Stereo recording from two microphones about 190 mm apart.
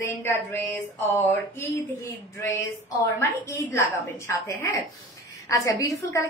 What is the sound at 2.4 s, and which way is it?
Speech, 15° left (ahead or behind).